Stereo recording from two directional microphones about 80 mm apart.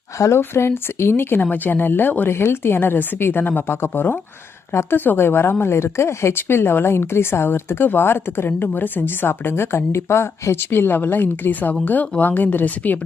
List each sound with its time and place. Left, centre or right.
0.2 s speech: left